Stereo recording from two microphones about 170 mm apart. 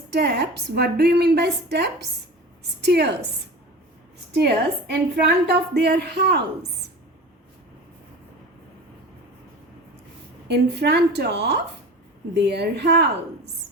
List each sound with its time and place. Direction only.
0.1 s a woman's voice: 70° right (ahead or behind)
4.4 s a woman's voice: 75° right (ahead or behind)
10.5 s a woman's voice: 80° right